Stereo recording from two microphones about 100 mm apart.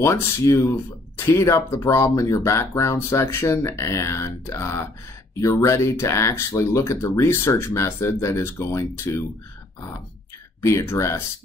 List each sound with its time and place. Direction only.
0.0 s speech: 30° left (ahead or behind)
10.6 s speech: 30° left (ahead or behind)